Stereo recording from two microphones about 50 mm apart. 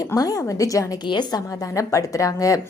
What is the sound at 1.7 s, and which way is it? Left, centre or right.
Speech, left.